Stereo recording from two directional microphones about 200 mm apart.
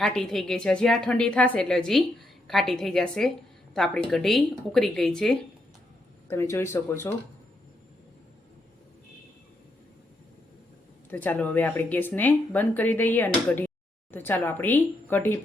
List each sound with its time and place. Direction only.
0.0 s a woman's voice: centre (ahead or behind)
6.2 s speech: 15° left (ahead or behind)
11.1 s speech: 10° left (ahead or behind)